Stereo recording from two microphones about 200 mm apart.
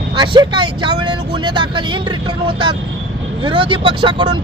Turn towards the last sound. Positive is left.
turn(degrees=-25)  # may be behind; listen again after turning